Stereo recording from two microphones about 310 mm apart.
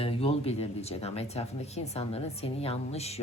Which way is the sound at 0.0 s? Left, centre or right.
Centre.